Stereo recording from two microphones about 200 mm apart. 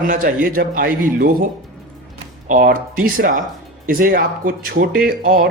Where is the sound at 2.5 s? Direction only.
45° right (ahead or behind).